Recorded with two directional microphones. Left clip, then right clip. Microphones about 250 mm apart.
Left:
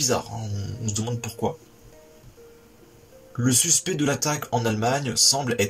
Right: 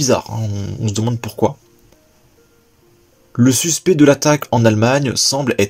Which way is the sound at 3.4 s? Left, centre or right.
Right.